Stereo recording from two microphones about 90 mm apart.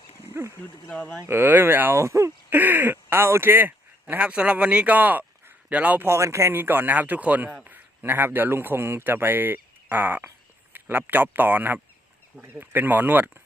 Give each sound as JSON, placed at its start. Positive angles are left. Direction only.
{"t": 0.9, "sound": "speech", "side_deg": 20}
{"t": 1.3, "sound": "speech", "side_deg": -25}
{"t": 2.6, "sound": "a man's voice", "side_deg": -20}
{"t": 6.1, "sound": "a man's voice", "side_deg": -30}